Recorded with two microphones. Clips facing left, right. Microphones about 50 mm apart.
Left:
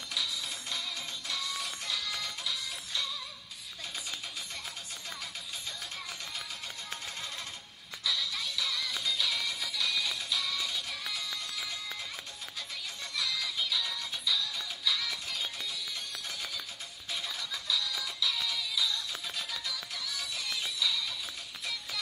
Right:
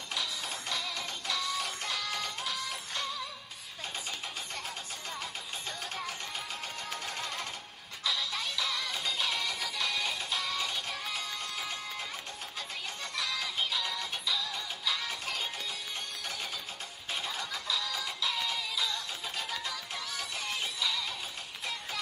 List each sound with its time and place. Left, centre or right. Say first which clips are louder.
0.1 s music: right 1 dB; right
8.0 s music: right 1 dB; right
13.0 s music: even; right
15.2 s music: right 2 dB; right
17.5 s music: even; right